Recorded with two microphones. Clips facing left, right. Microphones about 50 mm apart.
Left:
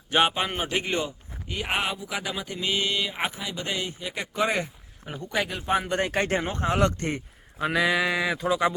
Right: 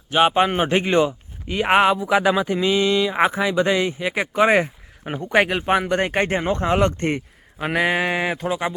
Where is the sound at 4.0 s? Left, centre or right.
Right.